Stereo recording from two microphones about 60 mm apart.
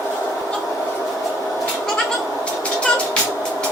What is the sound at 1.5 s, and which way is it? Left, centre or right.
Cat, centre.